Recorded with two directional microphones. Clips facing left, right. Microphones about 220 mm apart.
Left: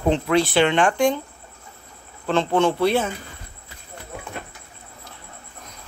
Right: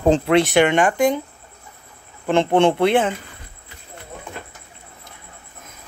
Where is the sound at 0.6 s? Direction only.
10° right (ahead or behind).